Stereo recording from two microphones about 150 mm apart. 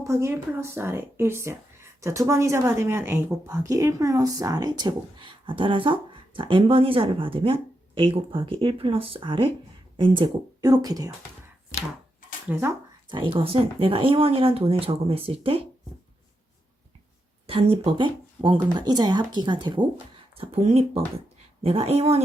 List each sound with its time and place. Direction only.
0.0 s speech: 20° right (ahead or behind)
12.5 s speech: 15° right (ahead or behind)
13.1 s speech: 35° right (ahead or behind)
17.4 s speech: 40° right (ahead or behind)